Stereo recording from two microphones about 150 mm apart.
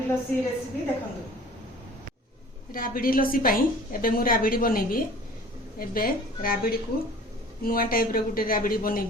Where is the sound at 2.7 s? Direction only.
70° left (ahead or behind).